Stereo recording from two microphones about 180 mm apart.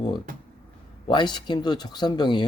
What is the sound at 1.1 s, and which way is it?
Speech, 25° left (ahead or behind).